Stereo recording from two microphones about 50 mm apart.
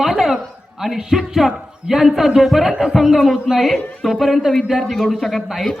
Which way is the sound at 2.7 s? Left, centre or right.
Centre.